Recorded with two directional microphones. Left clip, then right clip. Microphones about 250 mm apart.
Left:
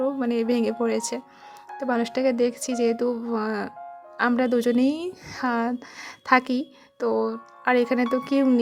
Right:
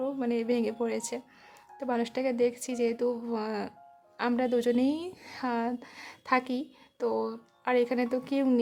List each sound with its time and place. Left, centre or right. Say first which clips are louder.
0.0 s a woman's voice: left 6 dB; left